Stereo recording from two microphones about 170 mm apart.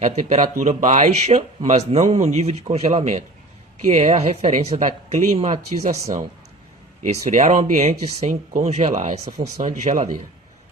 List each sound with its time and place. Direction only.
0.0 s a man's voice: 45° right (ahead or behind)